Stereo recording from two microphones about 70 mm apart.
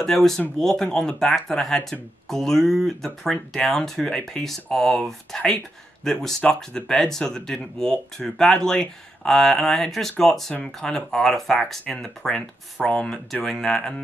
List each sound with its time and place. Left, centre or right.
0.0 s speech: centre